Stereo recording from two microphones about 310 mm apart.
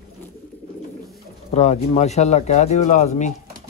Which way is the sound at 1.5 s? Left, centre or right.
Left.